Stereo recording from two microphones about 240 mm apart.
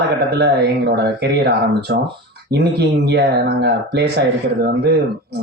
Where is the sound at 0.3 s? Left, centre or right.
Right.